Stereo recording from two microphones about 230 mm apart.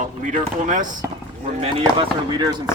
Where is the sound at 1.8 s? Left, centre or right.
Centre.